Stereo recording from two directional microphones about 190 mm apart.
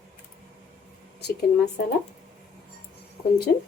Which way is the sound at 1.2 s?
60° left (ahead or behind).